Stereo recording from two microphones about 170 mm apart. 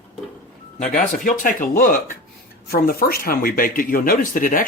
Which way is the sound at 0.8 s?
50° left (ahead or behind).